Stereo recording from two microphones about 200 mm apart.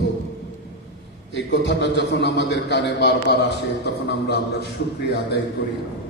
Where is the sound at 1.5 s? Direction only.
60° left (ahead or behind).